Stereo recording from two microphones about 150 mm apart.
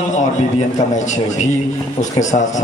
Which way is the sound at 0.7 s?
50° left (ahead or behind).